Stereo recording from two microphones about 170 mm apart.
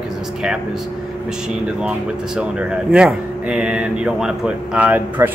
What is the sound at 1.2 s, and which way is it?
Speech, 5° right (ahead or behind).